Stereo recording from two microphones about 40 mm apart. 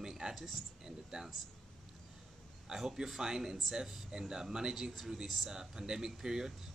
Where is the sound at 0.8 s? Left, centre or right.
Centre.